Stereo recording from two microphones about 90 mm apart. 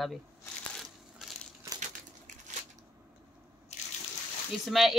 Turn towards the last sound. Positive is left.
turn(degrees=0)  # may be behind; listen again after turning